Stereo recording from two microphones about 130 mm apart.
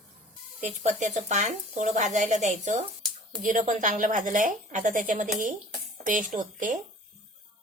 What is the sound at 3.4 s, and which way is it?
A woman's voice, 85° right.